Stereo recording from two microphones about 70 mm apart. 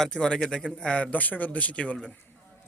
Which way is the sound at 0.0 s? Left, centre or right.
Centre.